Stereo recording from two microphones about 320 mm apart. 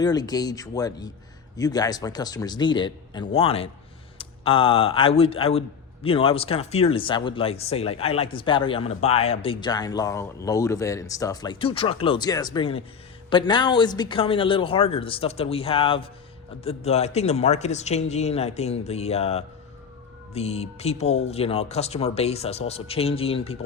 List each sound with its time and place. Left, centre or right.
0.0 s a man's voice: centre